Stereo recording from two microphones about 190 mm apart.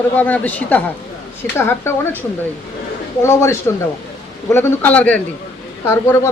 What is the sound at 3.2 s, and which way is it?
A woman's voice, 15° left (ahead or behind).